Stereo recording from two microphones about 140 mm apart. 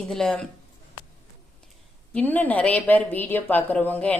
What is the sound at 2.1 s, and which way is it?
Speech, 10° left (ahead or behind).